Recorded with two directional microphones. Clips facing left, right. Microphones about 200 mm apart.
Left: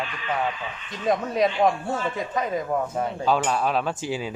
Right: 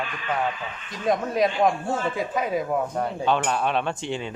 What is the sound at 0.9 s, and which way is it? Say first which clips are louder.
Speech: even; centre (ahead or behind).